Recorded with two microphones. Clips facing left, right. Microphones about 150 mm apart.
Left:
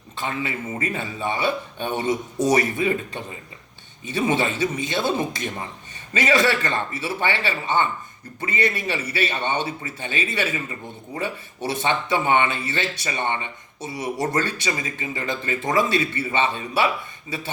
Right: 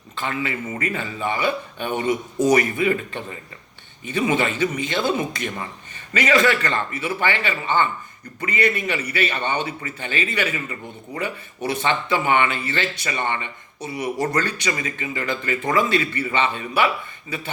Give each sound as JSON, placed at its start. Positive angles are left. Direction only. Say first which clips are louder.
{"t": 0.2, "sound": "speech", "louder": "right 1 dB", "side_deg": 20}